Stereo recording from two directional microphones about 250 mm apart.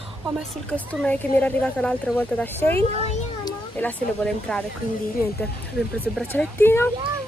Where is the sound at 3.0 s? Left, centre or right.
Left.